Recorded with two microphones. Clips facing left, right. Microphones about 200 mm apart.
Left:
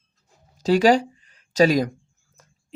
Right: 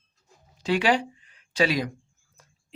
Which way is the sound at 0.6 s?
40° left (ahead or behind).